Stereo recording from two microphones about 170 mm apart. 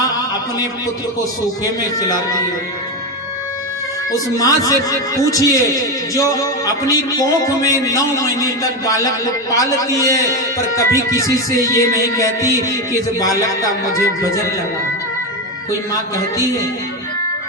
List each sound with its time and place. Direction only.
0.0 s a sound: 20° left (ahead or behind)
1.2 s a man's voice: 20° left (ahead or behind)
4.1 s a man's voice: 20° left (ahead or behind)
15.9 s a man's voice: 20° left (ahead or behind)